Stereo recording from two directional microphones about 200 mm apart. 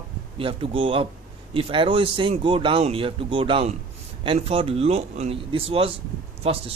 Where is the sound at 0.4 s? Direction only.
25° right (ahead or behind).